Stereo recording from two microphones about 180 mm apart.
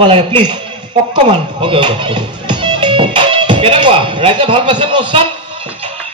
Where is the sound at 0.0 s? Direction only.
30° right (ahead or behind).